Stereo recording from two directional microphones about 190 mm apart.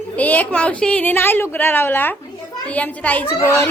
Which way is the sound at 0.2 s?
10° left (ahead or behind).